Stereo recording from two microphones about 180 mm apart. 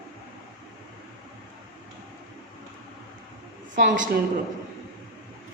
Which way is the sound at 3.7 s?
45° right (ahead or behind).